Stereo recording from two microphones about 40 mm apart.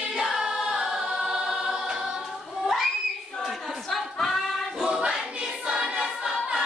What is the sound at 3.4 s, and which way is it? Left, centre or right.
Choir, centre.